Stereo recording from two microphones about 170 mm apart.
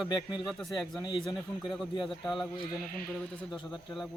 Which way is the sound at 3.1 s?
Centre (ahead or behind).